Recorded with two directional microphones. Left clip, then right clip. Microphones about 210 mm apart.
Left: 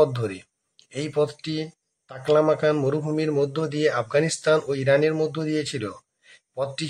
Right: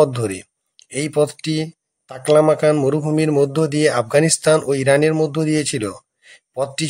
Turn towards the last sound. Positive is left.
turn(degrees=-30)  # may be behind; listen again after turning